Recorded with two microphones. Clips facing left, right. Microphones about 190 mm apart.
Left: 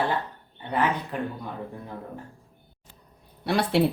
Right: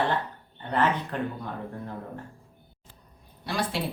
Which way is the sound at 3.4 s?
65° left (ahead or behind).